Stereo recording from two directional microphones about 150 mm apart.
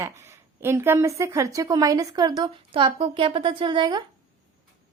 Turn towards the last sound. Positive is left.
turn(degrees=-30)  # may be behind; listen again after turning